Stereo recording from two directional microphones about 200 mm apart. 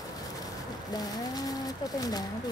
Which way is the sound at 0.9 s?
20° left (ahead or behind).